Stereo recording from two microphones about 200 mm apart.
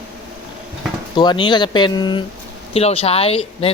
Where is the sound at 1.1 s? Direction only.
20° left (ahead or behind).